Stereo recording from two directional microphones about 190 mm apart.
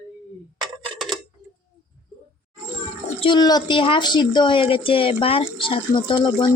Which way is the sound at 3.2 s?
25° left (ahead or behind).